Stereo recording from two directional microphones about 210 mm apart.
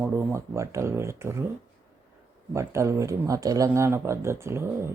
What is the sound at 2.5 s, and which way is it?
Speech, 15° right (ahead or behind).